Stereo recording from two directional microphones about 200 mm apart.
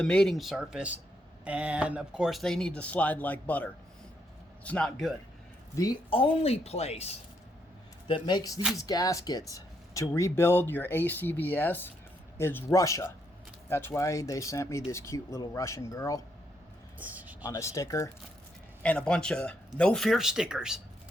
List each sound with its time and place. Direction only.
0.0 s speech: 5° left (ahead or behind)
6.1 s a woman's voice: 25° left (ahead or behind)
17.0 s speech: 10° right (ahead or behind)
17.4 s speech: 15° left (ahead or behind); by 20.8 s 5° right (ahead or behind)